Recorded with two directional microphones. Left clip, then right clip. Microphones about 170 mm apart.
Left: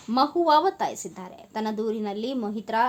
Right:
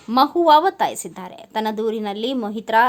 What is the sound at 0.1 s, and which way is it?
A woman's voice, 30° right (ahead or behind).